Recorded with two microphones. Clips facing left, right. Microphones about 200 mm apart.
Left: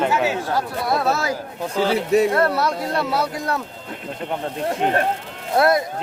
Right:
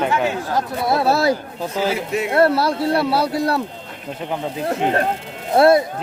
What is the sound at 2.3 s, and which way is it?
Speech, 30° right (ahead or behind).